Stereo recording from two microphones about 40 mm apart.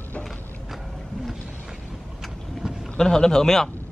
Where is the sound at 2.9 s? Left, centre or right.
Centre.